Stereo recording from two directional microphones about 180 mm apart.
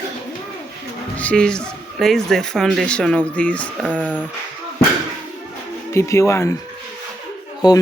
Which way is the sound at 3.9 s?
5° right (ahead or behind).